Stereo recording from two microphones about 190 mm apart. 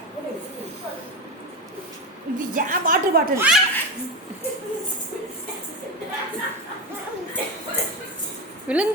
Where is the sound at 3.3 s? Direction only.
5° right (ahead or behind).